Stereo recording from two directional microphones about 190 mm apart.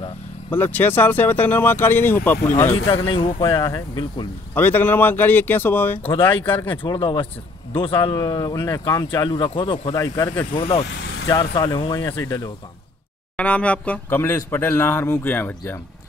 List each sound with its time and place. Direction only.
0.5 s speech: 10° left (ahead or behind)
3.3 s speech: 25° left (ahead or behind)
4.6 s speech: 10° left (ahead or behind)
6.0 s speech: 25° left (ahead or behind)
10.9 s vehicle: 85° left
11.2 s speech: 20° left (ahead or behind)
13.4 s speech: 5° left (ahead or behind)